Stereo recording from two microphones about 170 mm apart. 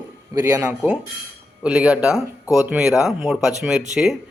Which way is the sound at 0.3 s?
10° right (ahead or behind).